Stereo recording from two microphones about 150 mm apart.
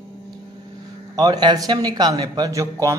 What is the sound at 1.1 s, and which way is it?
A man's voice, 25° right (ahead or behind).